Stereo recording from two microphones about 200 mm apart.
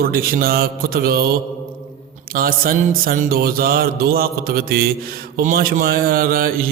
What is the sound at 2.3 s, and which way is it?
Speech, 45° right (ahead or behind).